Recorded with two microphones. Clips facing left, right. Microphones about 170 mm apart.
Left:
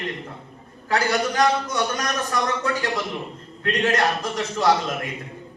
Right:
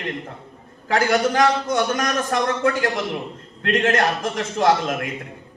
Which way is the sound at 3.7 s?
50° right (ahead or behind).